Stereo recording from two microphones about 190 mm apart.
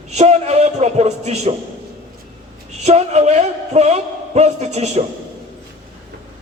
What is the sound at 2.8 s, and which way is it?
A man's voice, 35° right (ahead or behind).